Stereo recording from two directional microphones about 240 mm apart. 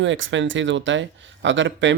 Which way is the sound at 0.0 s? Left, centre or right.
Right.